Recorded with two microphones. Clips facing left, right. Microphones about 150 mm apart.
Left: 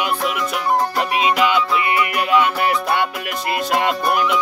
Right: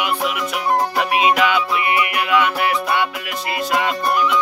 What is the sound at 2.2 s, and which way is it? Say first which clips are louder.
Music: left 2 dB; 40° left (ahead or behind).